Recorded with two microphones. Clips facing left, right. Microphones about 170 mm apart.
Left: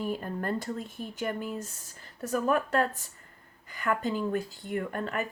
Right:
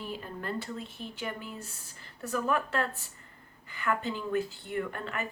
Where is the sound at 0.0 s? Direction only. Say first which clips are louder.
Left 6 dB; 45° left (ahead or behind).